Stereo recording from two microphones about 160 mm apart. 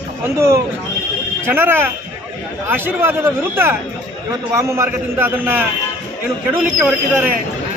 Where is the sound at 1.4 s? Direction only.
15° right (ahead or behind).